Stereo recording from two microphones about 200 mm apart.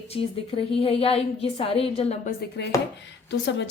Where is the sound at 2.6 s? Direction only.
55° left (ahead or behind).